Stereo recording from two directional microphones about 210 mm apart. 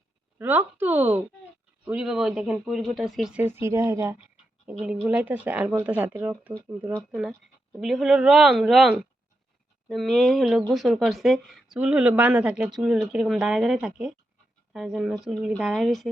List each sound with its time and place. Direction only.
0.3 s speech: 10° right (ahead or behind)
4.7 s speech: centre (ahead or behind)